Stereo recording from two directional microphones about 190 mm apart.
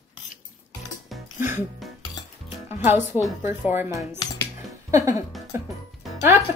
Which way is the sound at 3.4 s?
10° right (ahead or behind).